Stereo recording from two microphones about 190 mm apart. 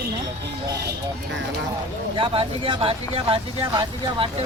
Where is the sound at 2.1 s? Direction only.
30° right (ahead or behind).